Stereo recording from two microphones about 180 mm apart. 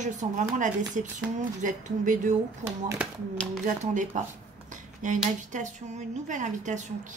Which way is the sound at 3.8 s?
45° right (ahead or behind).